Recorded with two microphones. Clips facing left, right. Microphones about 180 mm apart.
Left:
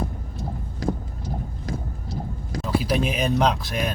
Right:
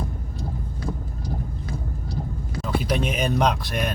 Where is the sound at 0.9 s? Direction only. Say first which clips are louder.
Left 6 dB; 35° left (ahead or behind).